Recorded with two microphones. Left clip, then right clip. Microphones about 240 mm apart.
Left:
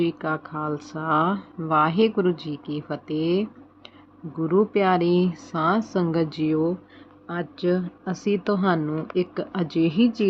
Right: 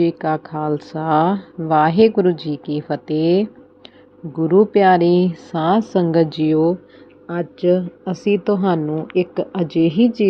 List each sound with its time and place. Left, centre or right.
0.0 s speech: centre